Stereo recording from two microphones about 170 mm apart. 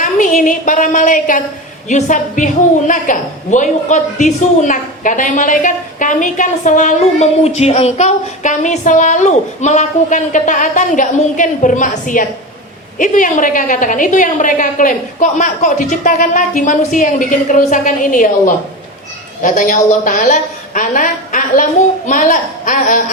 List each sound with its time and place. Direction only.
0.0 s a woman's voice: 50° left (ahead or behind)